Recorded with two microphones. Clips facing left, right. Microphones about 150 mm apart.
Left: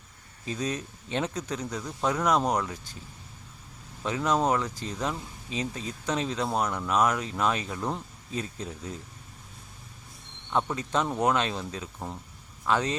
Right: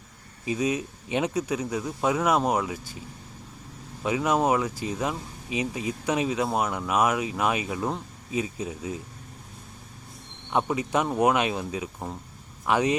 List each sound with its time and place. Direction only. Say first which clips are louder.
0.4 s speech: right 5 dB; 10° right (ahead or behind)
4.0 s speech: right 2 dB; 10° right (ahead or behind)
10.5 s speech: right 3 dB; 15° right (ahead or behind)